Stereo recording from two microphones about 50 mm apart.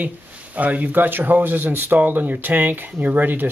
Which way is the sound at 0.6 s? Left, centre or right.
Right.